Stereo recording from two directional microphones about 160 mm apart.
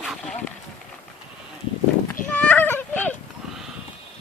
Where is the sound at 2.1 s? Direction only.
10° left (ahead or behind).